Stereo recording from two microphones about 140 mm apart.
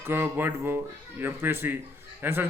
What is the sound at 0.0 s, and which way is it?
A man's voice, 15° right (ahead or behind).